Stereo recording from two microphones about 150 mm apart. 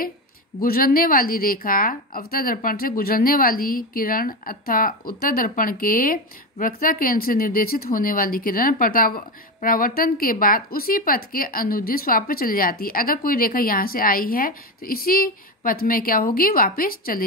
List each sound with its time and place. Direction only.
0.6 s a woman's voice: 75° left (ahead or behind)